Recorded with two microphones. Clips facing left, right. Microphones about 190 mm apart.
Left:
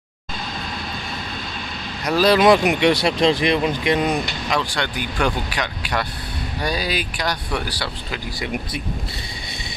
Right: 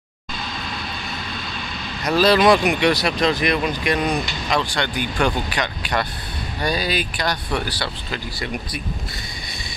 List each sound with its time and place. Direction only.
2.0 s speech: 15° left (ahead or behind)
4.1 s speech: 5° left (ahead or behind)